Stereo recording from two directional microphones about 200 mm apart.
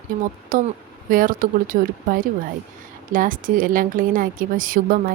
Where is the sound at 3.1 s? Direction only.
45° right (ahead or behind).